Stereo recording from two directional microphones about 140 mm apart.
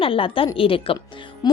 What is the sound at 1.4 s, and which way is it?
Music, 30° left (ahead or behind).